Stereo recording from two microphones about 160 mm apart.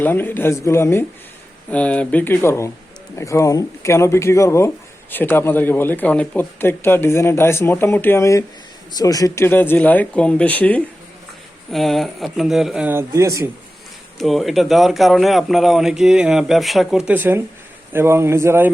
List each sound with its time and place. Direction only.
0.0 s a man's voice: 10° left (ahead or behind); by 13.5 s 20° right (ahead or behind)
14.2 s a man's voice: centre (ahead or behind); by 18.7 s 15° right (ahead or behind)